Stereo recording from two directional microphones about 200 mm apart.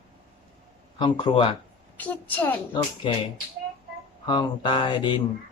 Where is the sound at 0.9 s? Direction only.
25° left (ahead or behind).